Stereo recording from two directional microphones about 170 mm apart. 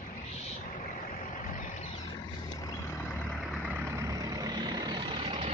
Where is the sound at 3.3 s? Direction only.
Centre (ahead or behind).